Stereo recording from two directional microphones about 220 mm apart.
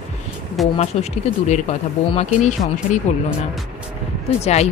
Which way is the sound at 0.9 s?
30° left (ahead or behind).